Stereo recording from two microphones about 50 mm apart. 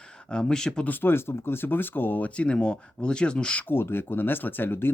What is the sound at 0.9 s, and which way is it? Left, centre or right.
Speech, left.